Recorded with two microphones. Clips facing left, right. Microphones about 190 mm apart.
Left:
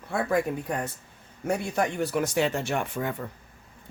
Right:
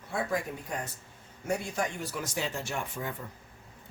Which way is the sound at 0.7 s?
60° left (ahead or behind).